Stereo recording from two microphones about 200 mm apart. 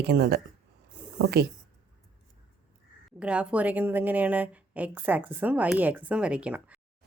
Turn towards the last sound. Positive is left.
turn(degrees=-5)  # may be behind; listen again after turning